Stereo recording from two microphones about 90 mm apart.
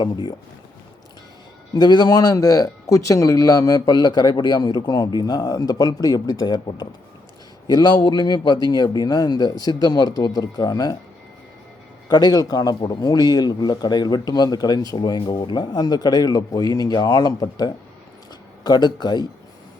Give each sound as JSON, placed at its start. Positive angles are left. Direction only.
{"t": 0.0, "sound": "speech", "side_deg": 55}
{"t": 1.7, "sound": "speech", "side_deg": 55}
{"t": 12.0, "sound": "speech", "side_deg": 50}